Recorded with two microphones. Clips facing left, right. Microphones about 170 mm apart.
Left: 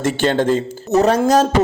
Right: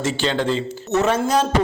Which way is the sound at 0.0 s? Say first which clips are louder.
Left 5 dB; 50° left (ahead or behind).